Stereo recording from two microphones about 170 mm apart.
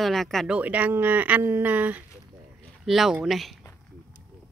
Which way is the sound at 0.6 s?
10° right (ahead or behind).